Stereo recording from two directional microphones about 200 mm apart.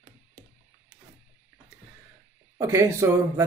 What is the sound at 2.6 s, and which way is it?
Speech, 15° right (ahead or behind).